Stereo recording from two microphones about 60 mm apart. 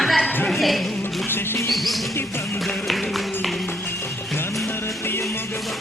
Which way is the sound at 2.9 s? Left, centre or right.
Centre.